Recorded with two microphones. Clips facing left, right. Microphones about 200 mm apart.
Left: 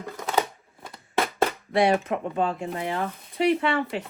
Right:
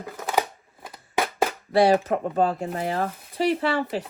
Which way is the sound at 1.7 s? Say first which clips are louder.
Right 3 dB; 35° right (ahead or behind).